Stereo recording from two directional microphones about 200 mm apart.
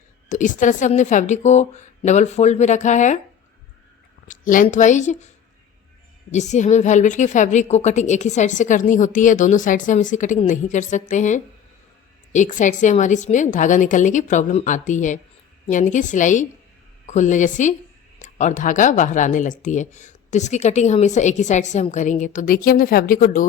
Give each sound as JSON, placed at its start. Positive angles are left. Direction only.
{"t": 0.3, "sound": "speech", "side_deg": 40}
{"t": 4.3, "sound": "speech", "side_deg": 40}
{"t": 6.3, "sound": "speech", "side_deg": 35}